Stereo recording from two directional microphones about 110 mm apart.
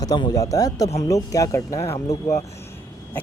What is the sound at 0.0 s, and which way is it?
Speech, 35° left (ahead or behind).